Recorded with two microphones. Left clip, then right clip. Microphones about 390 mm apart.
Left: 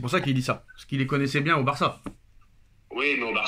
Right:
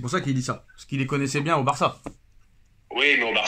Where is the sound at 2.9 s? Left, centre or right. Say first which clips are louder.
Right 5 dB; centre.